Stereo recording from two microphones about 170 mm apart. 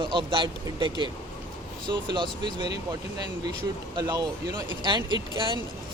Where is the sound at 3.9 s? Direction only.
25° right (ahead or behind).